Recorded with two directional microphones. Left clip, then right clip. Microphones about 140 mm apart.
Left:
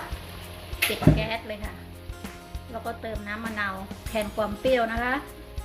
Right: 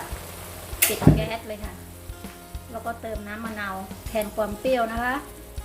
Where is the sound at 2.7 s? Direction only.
5° left (ahead or behind).